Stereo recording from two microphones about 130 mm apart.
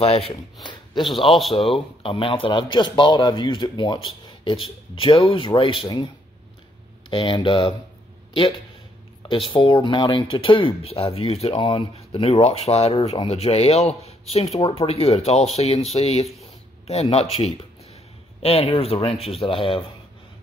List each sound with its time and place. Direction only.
0.0 s speech: 50° left (ahead or behind)
0.6 s a sound: 35° left (ahead or behind)
1.0 s speech: centre (ahead or behind)
2.0 s a man's voice: 45° left (ahead or behind)
7.1 s a man's voice: 45° left (ahead or behind)